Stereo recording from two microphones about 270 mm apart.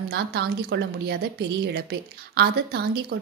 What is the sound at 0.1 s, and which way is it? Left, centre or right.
A woman's voice, right.